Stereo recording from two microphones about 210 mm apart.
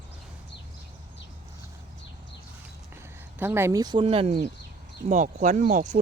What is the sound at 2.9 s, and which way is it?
Speech, 10° right (ahead or behind).